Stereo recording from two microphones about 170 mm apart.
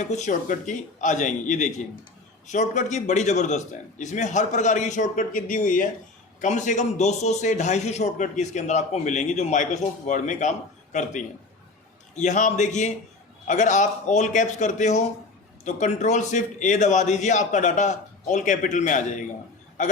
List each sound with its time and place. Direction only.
0.0 s a man's voice: 45° left (ahead or behind)
12.1 s a man's voice: 45° left (ahead or behind)